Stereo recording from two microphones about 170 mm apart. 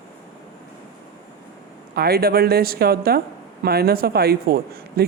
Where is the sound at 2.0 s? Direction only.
65° right (ahead or behind).